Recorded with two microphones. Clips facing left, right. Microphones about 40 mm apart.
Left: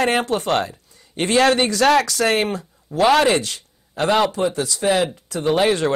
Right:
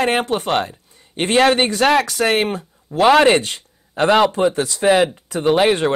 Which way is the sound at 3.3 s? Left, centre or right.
Right.